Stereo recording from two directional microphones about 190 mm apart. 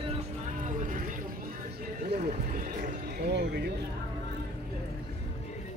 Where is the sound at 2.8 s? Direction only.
60° right (ahead or behind).